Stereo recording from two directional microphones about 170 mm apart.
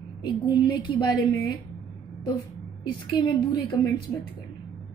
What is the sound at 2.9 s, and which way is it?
A woman's voice, 25° left (ahead or behind).